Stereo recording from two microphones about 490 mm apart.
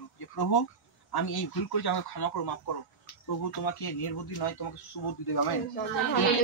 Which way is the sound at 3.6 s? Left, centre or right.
Left.